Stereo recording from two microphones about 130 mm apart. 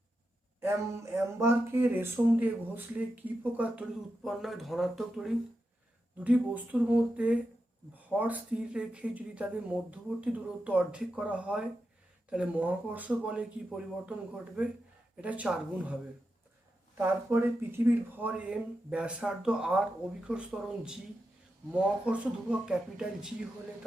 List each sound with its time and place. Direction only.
0.6 s speech: 20° right (ahead or behind); by 5.3 s centre (ahead or behind)
6.1 s speech: 10° right (ahead or behind)
17.0 s speech: 20° right (ahead or behind)